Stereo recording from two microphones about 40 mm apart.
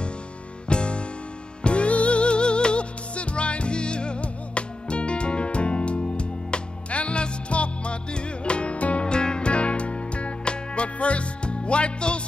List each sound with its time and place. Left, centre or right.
0.7 s music: left